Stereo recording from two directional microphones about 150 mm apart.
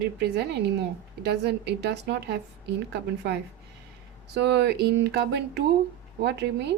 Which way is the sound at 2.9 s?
90° right.